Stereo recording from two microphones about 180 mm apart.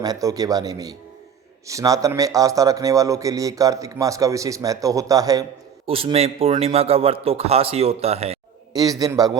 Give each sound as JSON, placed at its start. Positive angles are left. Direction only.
{"t": 0.0, "sound": "a man's voice", "side_deg": -20}
{"t": 5.8, "sound": "a man's voice", "side_deg": -30}
{"t": 8.7, "sound": "a man's voice", "side_deg": -20}